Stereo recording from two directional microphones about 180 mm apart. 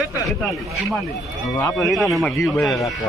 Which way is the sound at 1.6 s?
10° left (ahead or behind).